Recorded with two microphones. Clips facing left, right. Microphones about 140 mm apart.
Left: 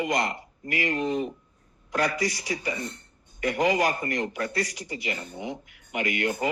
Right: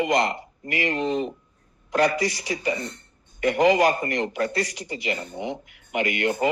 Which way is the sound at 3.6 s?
90° right.